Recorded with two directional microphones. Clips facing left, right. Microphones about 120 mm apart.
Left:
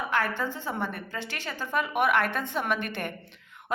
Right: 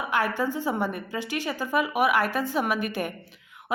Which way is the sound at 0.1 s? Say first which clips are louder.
Right 5 dB; 15° right (ahead or behind).